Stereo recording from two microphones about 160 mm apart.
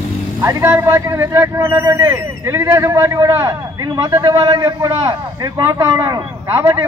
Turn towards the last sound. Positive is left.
turn(degrees=-15)  # may be behind; listen again after turning